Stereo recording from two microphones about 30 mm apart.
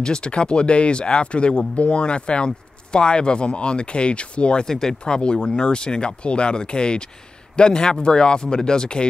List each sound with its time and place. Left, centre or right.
0.0 s speech: left
4.6 s speech: centre
5.0 s speech: left